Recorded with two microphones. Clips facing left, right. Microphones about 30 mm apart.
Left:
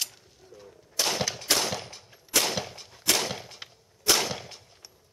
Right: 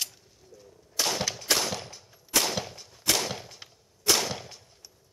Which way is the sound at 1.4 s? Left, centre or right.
Centre.